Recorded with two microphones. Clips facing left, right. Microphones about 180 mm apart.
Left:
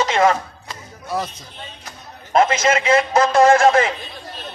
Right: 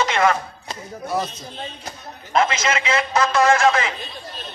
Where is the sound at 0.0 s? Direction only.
30° left (ahead or behind).